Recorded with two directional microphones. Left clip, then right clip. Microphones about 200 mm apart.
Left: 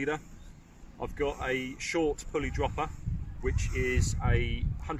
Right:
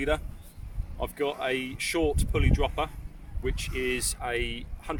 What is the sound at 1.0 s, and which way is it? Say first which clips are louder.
Speech: right 3 dB; 65° right (ahead or behind).